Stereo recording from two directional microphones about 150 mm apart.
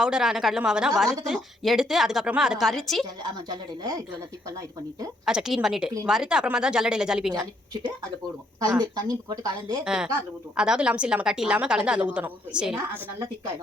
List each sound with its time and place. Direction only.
0.0 s a woman's voice: 5° right (ahead or behind)
5.2 s a woman's voice: 5° right (ahead or behind)
8.8 s speech: 25° right (ahead or behind)
9.8 s a woman's voice: 5° right (ahead or behind)